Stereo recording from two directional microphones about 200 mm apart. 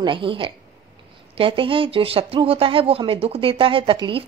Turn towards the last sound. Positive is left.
turn(degrees=-25)  # may be behind; listen again after turning